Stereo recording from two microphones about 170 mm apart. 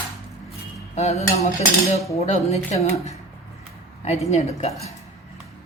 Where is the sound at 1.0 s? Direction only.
40° left (ahead or behind).